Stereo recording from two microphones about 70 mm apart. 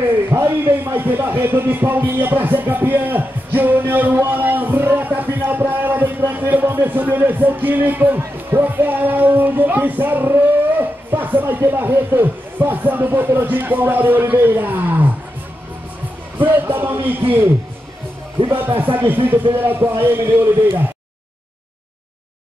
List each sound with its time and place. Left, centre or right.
0.3 s speech: right
16.3 s speech: right
18.6 s speech: right